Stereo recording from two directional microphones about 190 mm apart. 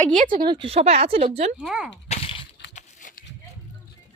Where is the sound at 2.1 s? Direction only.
30° left (ahead or behind).